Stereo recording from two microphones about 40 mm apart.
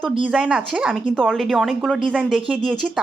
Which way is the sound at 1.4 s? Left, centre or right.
Centre.